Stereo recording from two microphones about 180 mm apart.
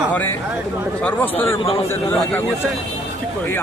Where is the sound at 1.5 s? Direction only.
30° left (ahead or behind).